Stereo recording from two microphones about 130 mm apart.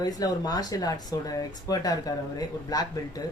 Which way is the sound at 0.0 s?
30° left (ahead or behind).